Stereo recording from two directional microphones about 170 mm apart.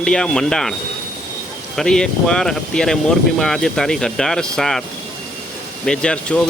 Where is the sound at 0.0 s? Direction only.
5° left (ahead or behind).